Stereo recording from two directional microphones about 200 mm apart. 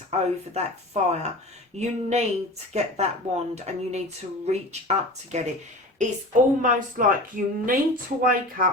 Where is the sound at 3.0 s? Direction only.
35° right (ahead or behind).